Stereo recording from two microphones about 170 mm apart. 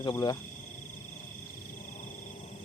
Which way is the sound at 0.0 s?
25° left (ahead or behind).